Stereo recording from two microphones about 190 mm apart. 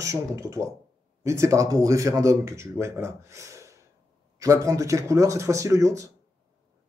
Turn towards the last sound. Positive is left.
turn(degrees=-15)  # may be behind; listen again after turning